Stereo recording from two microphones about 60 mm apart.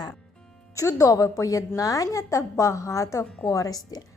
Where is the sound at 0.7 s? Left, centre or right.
Left.